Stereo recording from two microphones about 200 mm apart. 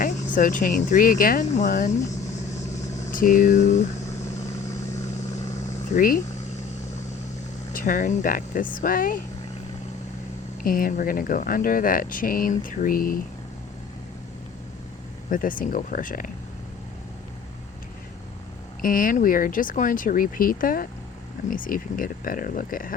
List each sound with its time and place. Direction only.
0.0 s speech: 40° left (ahead or behind)
3.1 s speech: 40° left (ahead or behind)
5.9 s speech: 40° left (ahead or behind)
7.7 s speech: 45° left (ahead or behind)
10.6 s speech: 45° left (ahead or behind)
15.3 s speech: 45° left (ahead or behind)
18.8 s speech: 45° left (ahead or behind)